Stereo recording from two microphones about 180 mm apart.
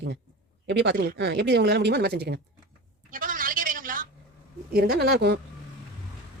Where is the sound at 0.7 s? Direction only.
75° right (ahead or behind).